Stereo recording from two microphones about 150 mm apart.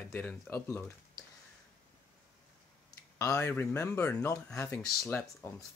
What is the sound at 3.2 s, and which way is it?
Speech, 20° left (ahead or behind).